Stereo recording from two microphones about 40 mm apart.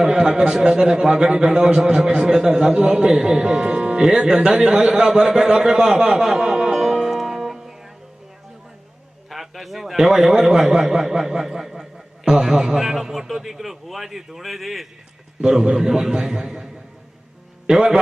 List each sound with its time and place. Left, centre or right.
0.0 s a man's voice: centre
6.0 s music: centre
9.3 s a man's voice: centre
15.4 s a man's voice: centre
17.7 s a man's voice: centre